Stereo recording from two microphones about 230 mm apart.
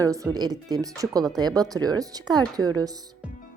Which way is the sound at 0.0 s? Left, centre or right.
Centre.